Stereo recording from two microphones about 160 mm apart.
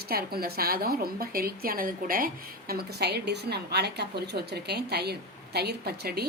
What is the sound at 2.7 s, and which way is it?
A woman's voice, 85° right.